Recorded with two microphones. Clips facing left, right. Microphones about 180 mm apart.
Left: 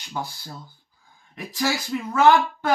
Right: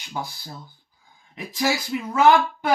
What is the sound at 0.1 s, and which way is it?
Speech, 15° right (ahead or behind).